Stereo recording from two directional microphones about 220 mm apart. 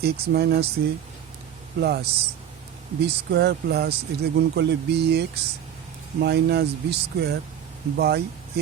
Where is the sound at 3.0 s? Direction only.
50° right (ahead or behind).